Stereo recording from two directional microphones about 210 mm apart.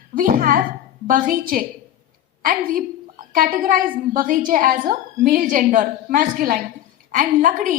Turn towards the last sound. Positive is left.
turn(degrees=-40)  # may be behind; listen again after turning